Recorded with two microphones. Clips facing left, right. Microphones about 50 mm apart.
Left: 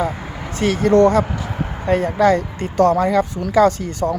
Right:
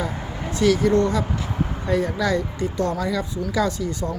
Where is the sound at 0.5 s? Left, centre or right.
Left.